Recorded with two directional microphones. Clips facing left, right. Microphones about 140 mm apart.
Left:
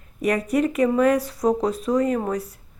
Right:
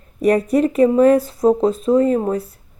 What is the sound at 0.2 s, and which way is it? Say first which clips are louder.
Speech: right 6 dB; 35° right (ahead or behind).